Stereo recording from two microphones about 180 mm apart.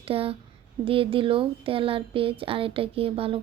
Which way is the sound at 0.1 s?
30° right (ahead or behind).